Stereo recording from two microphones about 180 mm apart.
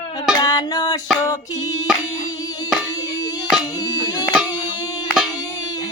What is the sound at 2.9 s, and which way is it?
Music, 20° left (ahead or behind).